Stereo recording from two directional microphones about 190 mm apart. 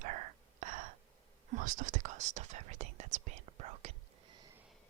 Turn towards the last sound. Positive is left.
turn(degrees=-35)  # may be behind; listen again after turning